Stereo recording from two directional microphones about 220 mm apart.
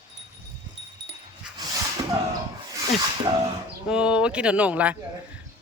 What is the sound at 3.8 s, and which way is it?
Speech, 5° right (ahead or behind).